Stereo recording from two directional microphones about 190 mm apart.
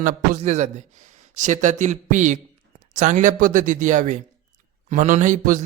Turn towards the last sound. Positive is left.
turn(degrees=-45)  # may be behind; listen again after turning